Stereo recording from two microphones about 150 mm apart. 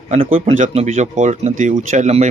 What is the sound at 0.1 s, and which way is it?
Speech, 55° right (ahead or behind).